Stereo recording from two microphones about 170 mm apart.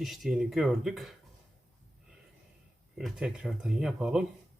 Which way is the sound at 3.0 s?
5° right (ahead or behind).